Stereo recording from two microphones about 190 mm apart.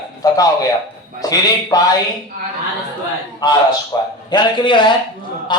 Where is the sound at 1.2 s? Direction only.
20° left (ahead or behind).